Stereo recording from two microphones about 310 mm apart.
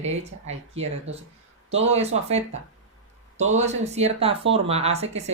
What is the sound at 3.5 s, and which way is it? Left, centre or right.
A woman's voice, right.